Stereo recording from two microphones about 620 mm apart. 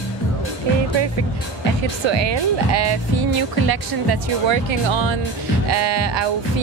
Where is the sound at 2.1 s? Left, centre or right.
Right.